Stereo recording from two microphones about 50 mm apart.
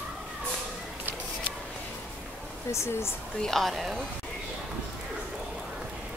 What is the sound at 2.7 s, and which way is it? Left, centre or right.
Speech, left.